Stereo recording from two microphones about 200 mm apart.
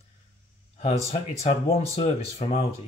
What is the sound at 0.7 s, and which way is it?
Speech, 30° left (ahead or behind).